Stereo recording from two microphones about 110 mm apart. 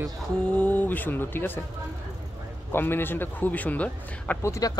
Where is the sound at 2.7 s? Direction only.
20° left (ahead or behind).